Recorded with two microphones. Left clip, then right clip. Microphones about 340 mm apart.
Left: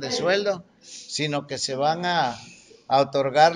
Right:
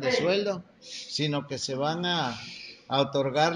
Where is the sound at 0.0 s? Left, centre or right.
Left.